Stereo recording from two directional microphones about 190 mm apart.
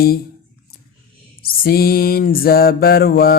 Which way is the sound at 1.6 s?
55° left (ahead or behind).